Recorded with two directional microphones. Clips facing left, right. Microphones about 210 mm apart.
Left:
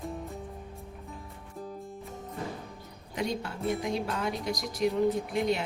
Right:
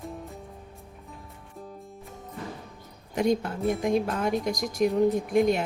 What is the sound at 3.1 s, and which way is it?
Speech, 50° right (ahead or behind).